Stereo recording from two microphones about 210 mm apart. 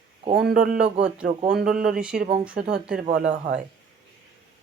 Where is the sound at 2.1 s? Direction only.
45° right (ahead or behind).